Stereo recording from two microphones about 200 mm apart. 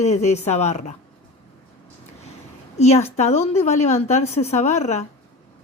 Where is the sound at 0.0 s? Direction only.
35° left (ahead or behind).